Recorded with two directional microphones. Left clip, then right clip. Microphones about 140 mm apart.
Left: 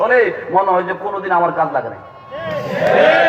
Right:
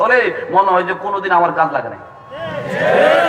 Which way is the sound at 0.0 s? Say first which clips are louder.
Even; 10° left (ahead or behind).